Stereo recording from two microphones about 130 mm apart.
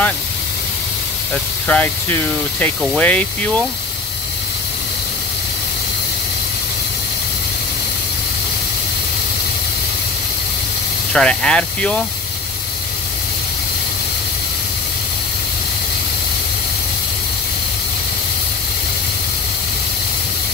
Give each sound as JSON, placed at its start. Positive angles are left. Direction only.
{"t": 1.3, "sound": "speech", "side_deg": 10}
{"t": 11.1, "sound": "speech", "side_deg": 5}